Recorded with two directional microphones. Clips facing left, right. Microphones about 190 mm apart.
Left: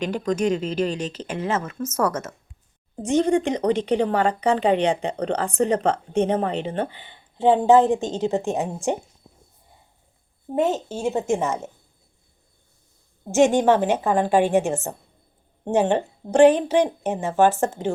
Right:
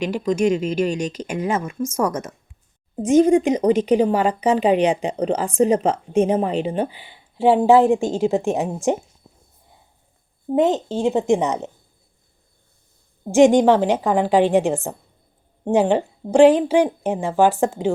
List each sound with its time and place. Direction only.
0.0 s speech: 10° right (ahead or behind)
10.5 s speech: 15° right (ahead or behind)
13.3 s speech: 15° right (ahead or behind)